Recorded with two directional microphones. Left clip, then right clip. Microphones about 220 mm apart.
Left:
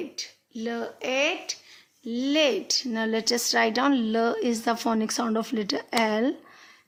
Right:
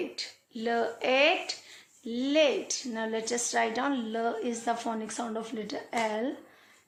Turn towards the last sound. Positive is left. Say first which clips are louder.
# left 6 dB
turn(degrees=40)  # may be behind; listen again after turning